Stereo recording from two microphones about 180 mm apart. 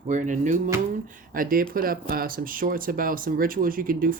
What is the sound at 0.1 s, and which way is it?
Speech, 45° right (ahead or behind).